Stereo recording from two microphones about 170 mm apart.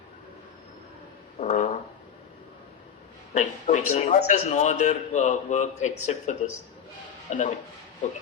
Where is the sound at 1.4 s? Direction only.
45° left (ahead or behind).